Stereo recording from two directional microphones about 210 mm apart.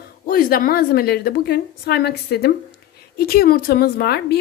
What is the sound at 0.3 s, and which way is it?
Speech, 45° left (ahead or behind).